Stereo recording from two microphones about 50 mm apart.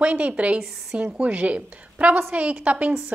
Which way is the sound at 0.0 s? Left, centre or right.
Right.